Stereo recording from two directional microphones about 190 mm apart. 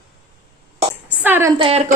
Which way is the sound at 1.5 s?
30° right (ahead or behind).